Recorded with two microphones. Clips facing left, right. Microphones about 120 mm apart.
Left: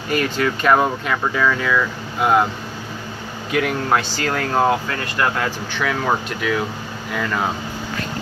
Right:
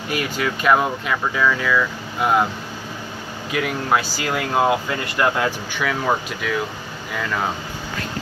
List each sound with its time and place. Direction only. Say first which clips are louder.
0.1 s speech: left 4 dB; 5° right (ahead or behind)
3.5 s speech: left 2 dB; centre (ahead or behind)
5.8 s speech: left 1 dB; centre (ahead or behind)